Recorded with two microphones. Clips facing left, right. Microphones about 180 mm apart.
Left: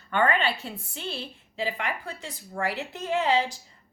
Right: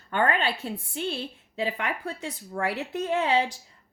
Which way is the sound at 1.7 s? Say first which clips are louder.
Right 2 dB; 60° right (ahead or behind).